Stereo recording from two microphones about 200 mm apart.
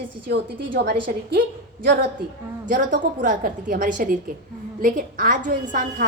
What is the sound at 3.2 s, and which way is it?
A woman's voice, 40° right (ahead or behind).